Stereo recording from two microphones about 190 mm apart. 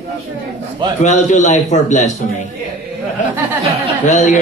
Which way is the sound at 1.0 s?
40° left (ahead or behind).